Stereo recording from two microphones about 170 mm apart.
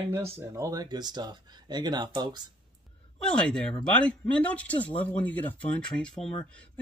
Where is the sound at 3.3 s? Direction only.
5° left (ahead or behind).